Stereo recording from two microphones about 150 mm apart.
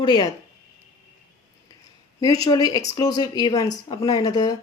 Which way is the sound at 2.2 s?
25° left (ahead or behind).